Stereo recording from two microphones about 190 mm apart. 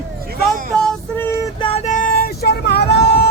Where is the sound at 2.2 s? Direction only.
55° left (ahead or behind).